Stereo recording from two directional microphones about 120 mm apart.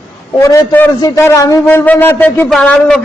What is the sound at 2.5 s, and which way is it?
Speech, 5° left (ahead or behind).